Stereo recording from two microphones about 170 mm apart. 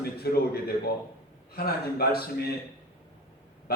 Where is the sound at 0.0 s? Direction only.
65° left (ahead or behind).